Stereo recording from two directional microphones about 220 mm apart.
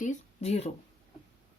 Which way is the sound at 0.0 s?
30° left (ahead or behind).